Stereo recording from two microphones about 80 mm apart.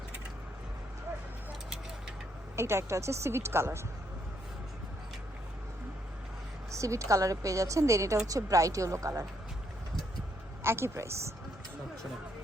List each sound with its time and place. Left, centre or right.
2.6 s a woman's voice: right
6.7 s a woman's voice: right
10.6 s a woman's voice: right